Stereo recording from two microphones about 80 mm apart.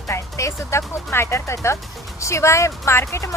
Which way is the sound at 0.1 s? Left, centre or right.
Left.